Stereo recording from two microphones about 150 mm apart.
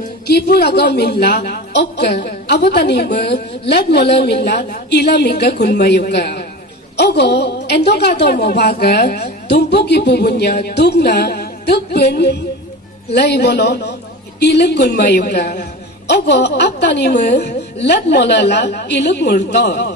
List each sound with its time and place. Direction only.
0.3 s a woman's voice: 90° left